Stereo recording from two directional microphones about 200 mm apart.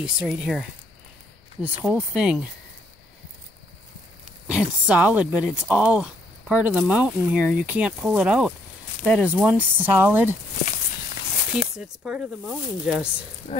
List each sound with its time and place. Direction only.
0.0 s speech: 5° right (ahead or behind)
4.5 s speech: 5° right (ahead or behind)
11.8 s speech: 5° right (ahead or behind)
13.5 s speech: 30° left (ahead or behind)